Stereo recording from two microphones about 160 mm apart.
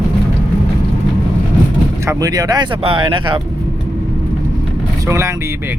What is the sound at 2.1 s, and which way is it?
Speech, 20° right (ahead or behind).